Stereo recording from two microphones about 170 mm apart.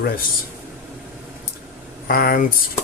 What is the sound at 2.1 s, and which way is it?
Speech, 60° left (ahead or behind).